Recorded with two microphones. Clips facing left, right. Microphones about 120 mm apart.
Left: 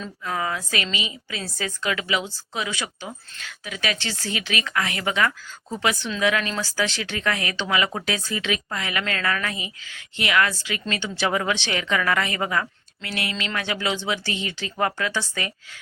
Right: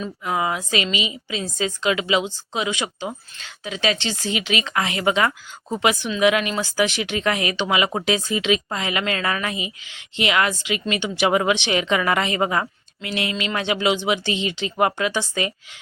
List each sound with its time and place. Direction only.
0.0 s speech: 15° right (ahead or behind)